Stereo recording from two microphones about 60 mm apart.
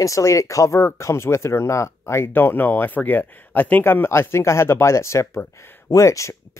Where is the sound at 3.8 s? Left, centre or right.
Left.